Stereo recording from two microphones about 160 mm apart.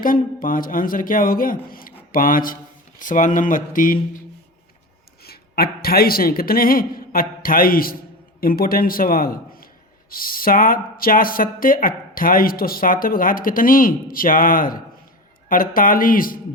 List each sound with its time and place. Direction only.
0.0 s speech: 60° left (ahead or behind)
5.2 s a man's voice: 75° left (ahead or behind); by 16.4 s 60° left (ahead or behind)